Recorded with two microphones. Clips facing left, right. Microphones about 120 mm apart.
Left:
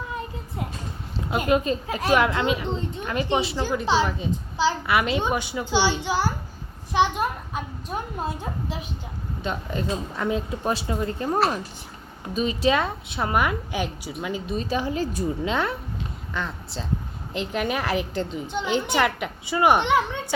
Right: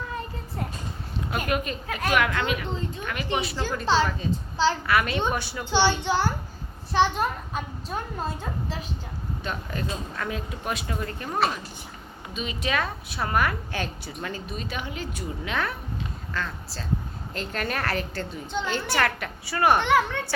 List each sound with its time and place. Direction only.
1.3 s a child's voice: 25° left (ahead or behind)
12.3 s a woman's voice: 35° left (ahead or behind); by 14.4 s 10° left (ahead or behind)
14.5 s a woman's voice: 30° left (ahead or behind)
15.4 s a child's voice: 25° left (ahead or behind)